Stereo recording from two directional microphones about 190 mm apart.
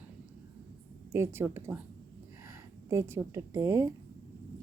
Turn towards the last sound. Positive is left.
turn(degrees=-15)  # may be behind; listen again after turning